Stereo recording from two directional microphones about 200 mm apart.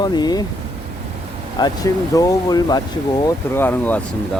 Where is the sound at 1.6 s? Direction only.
20° left (ahead or behind).